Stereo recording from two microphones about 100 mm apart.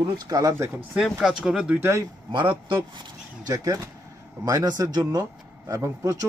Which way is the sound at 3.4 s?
35° right (ahead or behind).